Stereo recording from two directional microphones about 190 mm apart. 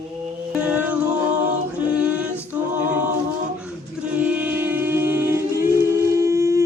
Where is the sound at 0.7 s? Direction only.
5° right (ahead or behind).